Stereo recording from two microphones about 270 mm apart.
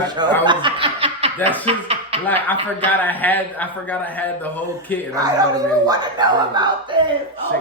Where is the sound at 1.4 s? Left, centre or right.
Centre.